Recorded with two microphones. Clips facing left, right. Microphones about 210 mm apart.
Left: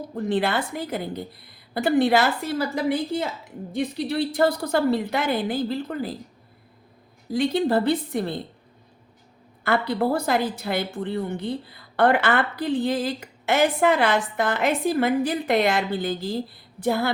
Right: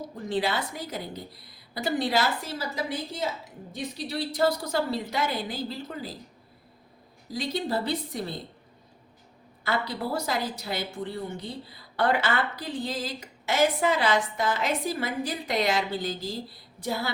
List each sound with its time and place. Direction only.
0.3 s a woman's voice: 55° left (ahead or behind)
7.3 s a woman's voice: 55° left (ahead or behind)
9.6 s a woman's voice: 55° left (ahead or behind)